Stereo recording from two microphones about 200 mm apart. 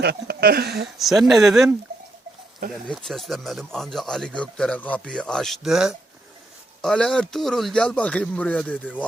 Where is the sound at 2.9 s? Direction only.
Centre (ahead or behind).